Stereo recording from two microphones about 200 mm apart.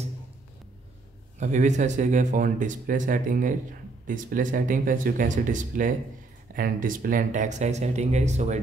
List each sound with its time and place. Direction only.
1.4 s speech: 35° right (ahead or behind)